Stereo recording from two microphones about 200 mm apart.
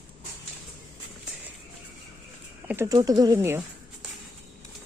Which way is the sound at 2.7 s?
10° right (ahead or behind).